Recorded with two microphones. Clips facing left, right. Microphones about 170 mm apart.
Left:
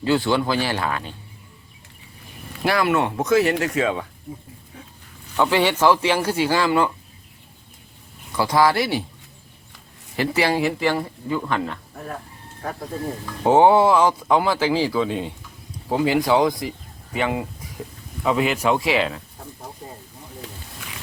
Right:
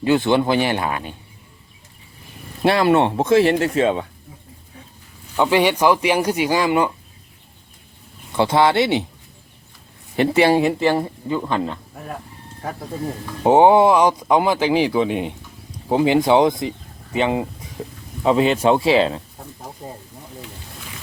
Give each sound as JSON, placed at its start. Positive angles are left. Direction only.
{"t": 0.0, "sound": "speech", "side_deg": -20}
{"t": 2.6, "sound": "speech", "side_deg": -25}
{"t": 5.4, "sound": "a man's voice", "side_deg": -15}
{"t": 8.4, "sound": "speech", "side_deg": -25}
{"t": 10.2, "sound": "speech", "side_deg": -25}
{"t": 13.4, "sound": "a man's voice", "side_deg": -20}